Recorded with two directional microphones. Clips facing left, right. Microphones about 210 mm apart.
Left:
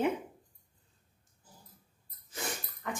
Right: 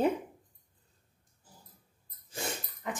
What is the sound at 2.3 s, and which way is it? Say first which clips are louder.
Dog: right 2 dB; 25° right (ahead or behind).